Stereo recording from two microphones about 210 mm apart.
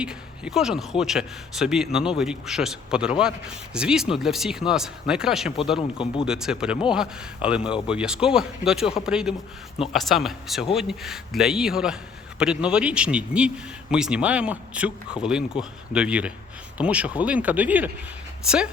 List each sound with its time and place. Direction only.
0.0 s a man's voice: 5° right (ahead or behind)
5.7 s speech: 25° left (ahead or behind)
6.2 s a man's voice: 5° right (ahead or behind)